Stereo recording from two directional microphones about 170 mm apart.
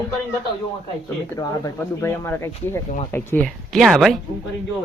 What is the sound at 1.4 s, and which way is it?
Speech, 15° left (ahead or behind).